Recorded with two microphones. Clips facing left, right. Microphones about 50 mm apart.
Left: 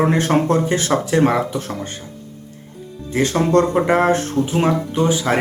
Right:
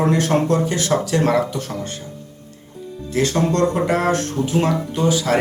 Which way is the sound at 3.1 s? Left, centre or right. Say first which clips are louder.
Left 3 dB; left.